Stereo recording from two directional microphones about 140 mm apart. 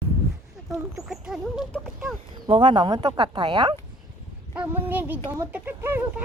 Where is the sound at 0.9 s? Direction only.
Centre (ahead or behind).